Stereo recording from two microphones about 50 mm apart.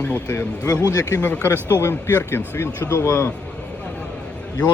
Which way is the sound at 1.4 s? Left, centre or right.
Left.